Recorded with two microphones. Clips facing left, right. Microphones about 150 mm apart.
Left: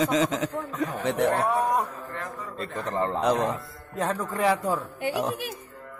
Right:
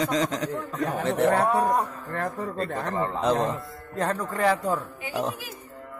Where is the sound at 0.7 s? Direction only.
Centre (ahead or behind).